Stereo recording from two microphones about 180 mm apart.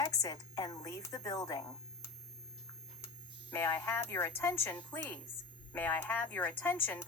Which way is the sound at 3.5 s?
15° left (ahead or behind).